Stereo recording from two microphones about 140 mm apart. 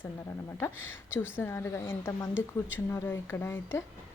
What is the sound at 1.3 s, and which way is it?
A woman's voice, 15° left (ahead or behind).